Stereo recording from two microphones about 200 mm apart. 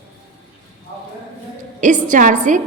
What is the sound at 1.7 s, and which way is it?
Speech, 40° right (ahead or behind).